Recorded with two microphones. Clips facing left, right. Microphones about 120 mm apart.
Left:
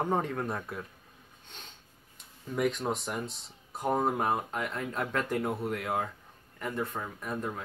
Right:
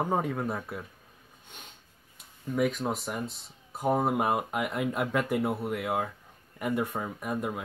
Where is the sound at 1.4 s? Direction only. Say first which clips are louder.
Right 1 dB; 10° right (ahead or behind).